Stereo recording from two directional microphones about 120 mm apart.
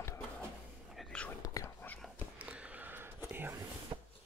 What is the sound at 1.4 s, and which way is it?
Whispering, 30° left (ahead or behind).